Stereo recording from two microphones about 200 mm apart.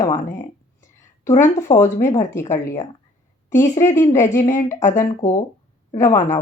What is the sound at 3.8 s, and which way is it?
A woman's voice, 15° left (ahead or behind).